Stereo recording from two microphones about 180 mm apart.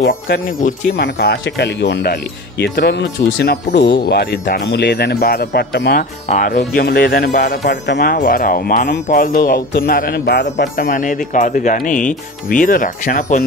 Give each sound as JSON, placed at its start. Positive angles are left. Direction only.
{"t": 0.6, "sound": "speech", "side_deg": 45}
{"t": 1.0, "sound": "speech", "side_deg": 65}
{"t": 6.2, "sound": "speech", "side_deg": 45}
{"t": 10.6, "sound": "speech", "side_deg": 50}